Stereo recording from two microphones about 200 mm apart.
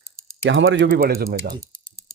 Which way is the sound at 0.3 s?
75° right (ahead or behind).